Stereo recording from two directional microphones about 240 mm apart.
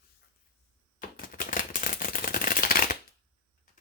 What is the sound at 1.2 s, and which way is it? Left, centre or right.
Typewriter, left.